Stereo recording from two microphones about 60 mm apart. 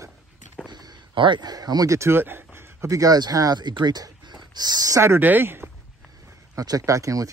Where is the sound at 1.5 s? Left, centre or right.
Right.